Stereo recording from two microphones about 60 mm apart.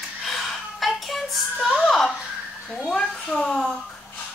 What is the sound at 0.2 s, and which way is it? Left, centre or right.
Child singing, centre.